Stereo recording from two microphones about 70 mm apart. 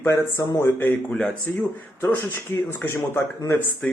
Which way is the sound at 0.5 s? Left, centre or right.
Left.